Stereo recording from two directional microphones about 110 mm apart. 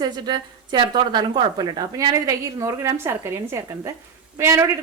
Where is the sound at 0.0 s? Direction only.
40° right (ahead or behind).